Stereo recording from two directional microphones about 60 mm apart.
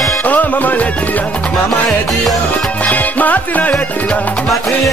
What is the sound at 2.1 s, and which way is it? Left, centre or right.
Music, centre.